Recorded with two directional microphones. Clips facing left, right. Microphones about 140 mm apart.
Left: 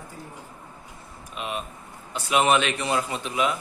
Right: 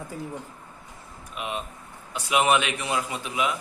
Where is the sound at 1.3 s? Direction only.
20° right (ahead or behind).